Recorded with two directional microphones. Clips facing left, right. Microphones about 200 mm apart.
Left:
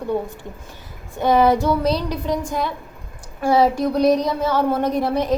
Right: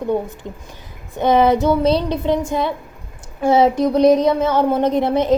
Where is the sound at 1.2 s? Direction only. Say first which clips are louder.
Right 2 dB; 20° right (ahead or behind).